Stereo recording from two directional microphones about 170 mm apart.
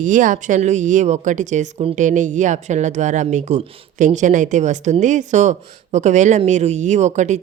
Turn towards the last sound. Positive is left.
turn(degrees=-45)  # may be behind; listen again after turning